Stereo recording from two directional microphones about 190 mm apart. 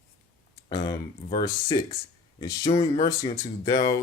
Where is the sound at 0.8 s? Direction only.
20° left (ahead or behind).